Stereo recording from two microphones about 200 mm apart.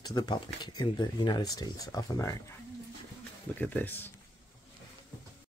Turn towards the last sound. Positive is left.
turn(degrees=10)  # may be behind; listen again after turning